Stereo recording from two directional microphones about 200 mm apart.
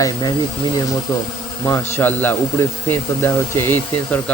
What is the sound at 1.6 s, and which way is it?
Speech, 10° left (ahead or behind).